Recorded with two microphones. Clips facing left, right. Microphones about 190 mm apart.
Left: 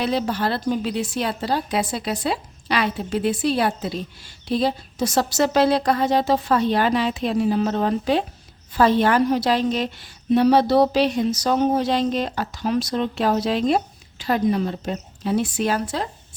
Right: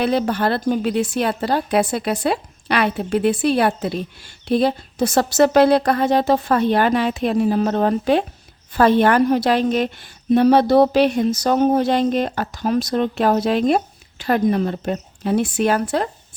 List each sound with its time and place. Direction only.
0.0 s a woman's voice: 55° right (ahead or behind)